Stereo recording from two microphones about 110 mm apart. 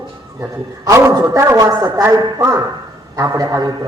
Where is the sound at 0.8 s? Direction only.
30° right (ahead or behind).